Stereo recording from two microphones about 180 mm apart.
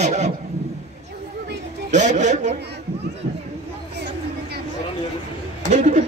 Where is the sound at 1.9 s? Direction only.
40° right (ahead or behind).